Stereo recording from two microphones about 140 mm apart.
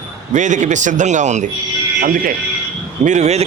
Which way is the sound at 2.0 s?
80° right.